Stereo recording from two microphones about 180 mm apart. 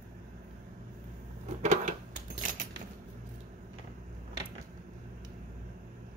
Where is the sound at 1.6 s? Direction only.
40° right (ahead or behind).